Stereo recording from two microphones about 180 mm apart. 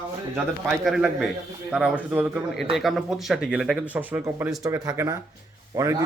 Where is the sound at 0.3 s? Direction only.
Centre (ahead or behind).